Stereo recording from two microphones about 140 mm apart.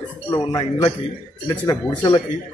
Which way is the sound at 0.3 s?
30° left (ahead or behind).